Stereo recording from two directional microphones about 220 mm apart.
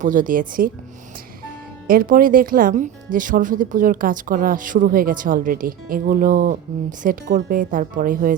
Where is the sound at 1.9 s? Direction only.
40° right (ahead or behind).